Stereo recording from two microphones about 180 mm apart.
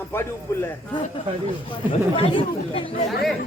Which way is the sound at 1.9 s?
30° left (ahead or behind).